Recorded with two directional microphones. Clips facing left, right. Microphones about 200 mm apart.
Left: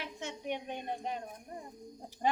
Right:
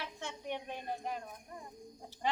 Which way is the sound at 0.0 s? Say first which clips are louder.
Left 2 dB; 20° left (ahead or behind).